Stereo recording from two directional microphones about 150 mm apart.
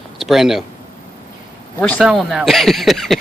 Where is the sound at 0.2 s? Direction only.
Centre (ahead or behind).